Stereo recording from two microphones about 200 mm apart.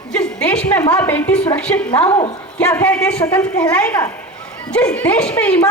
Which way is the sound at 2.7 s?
5° left (ahead or behind).